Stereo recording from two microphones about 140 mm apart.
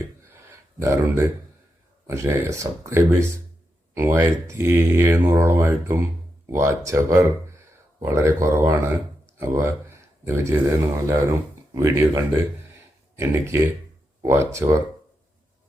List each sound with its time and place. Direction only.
0.8 s speech: 20° right (ahead or behind)